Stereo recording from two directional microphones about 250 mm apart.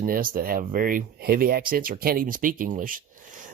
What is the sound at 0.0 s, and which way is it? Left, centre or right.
Speech, right.